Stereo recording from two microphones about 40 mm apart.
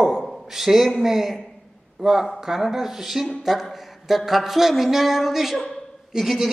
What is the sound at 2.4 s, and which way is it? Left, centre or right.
Speech, centre.